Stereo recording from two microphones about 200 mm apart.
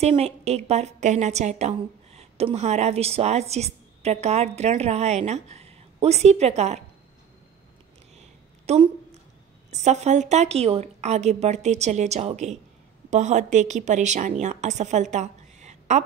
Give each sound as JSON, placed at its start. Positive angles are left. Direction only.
{"t": 0.0, "sound": "a woman's voice", "side_deg": -30}
{"t": 8.7, "sound": "a woman's voice", "side_deg": -35}